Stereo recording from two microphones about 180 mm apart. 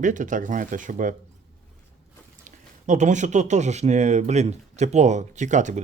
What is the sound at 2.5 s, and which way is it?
Speech, 40° right (ahead or behind).